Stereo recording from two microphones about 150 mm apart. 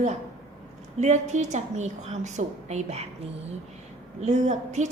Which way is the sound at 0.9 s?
50° right (ahead or behind).